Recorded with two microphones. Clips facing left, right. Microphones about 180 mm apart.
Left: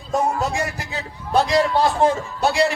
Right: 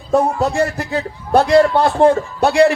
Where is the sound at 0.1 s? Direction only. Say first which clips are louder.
Right 6 dB; 55° right (ahead or behind).